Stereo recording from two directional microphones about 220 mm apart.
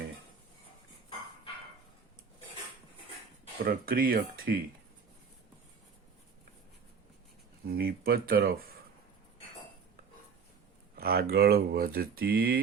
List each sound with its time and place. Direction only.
3.6 s speech: 40° right (ahead or behind)
7.7 s speech: 45° right (ahead or behind)
10.9 s speech: 45° right (ahead or behind)